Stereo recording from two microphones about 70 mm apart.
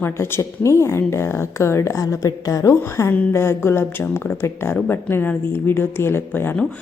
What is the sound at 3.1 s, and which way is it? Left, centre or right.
A woman's voice, left.